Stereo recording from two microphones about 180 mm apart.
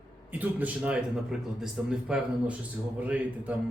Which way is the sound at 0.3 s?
10° right (ahead or behind).